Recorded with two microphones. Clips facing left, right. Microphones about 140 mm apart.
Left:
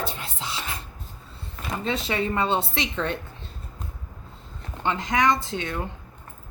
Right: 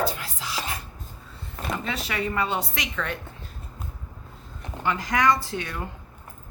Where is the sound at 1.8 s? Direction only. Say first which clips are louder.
Left 6 dB; 25° left (ahead or behind).